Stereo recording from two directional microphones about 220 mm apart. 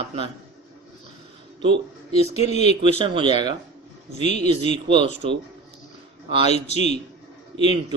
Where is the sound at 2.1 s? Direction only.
30° left (ahead or behind).